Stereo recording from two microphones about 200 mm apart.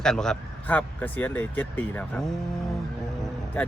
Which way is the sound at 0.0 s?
5° left (ahead or behind).